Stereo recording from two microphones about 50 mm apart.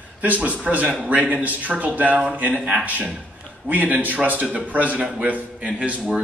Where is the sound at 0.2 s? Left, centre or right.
Right.